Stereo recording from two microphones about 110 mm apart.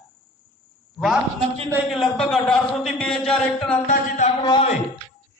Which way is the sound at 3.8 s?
90° left.